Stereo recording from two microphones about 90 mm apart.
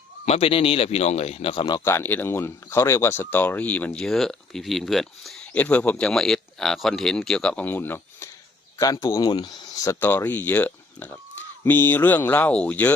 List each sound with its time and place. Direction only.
0.4 s speech: 90° left; by 1.8 s 60° left (ahead or behind)
1.8 s speech: 30° left (ahead or behind)
4.0 s speech: 5° left (ahead or behind)
5.5 s speech: 15° left (ahead or behind)
8.8 s speech: 40° left (ahead or behind)
9.3 s speech: 60° left (ahead or behind)
9.7 s speech: 35° left (ahead or behind)
10.0 s speech: 20° left (ahead or behind)